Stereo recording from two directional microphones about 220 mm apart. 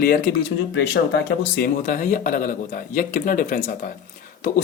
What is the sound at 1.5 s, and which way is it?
Speech, 40° left (ahead or behind).